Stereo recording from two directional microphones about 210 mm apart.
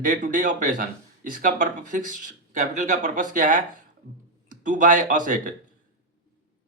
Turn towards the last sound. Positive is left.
turn(degrees=-40)  # may be behind; listen again after turning